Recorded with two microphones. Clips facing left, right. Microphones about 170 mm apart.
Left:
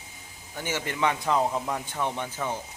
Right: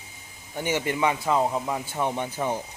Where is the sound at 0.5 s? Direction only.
15° right (ahead or behind).